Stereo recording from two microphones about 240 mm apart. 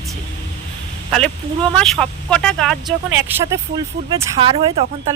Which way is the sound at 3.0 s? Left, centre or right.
Centre.